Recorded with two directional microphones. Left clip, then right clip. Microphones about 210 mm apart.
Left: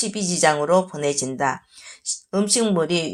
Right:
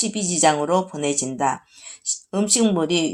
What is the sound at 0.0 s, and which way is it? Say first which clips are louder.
Speech: right 1 dB; 25° left (ahead or behind).